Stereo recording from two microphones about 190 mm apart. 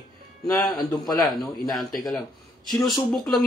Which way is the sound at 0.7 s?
20° left (ahead or behind).